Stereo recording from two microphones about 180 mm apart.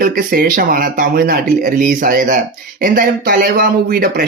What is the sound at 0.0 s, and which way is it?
Speech, 50° right (ahead or behind).